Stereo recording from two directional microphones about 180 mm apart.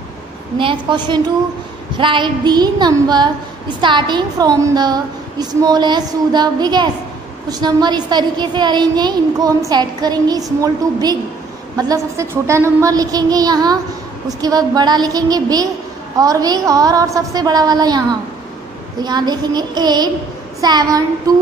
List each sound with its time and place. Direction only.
0.6 s a woman's voice: 25° right (ahead or behind)